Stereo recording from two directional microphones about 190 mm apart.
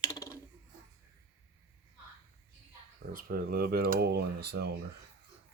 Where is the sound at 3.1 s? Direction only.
55° right (ahead or behind).